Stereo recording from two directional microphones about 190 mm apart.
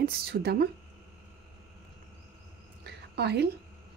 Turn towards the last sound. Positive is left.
turn(degrees=-60)  # may be behind; listen again after turning